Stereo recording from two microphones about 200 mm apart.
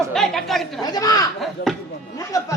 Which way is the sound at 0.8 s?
20° left (ahead or behind).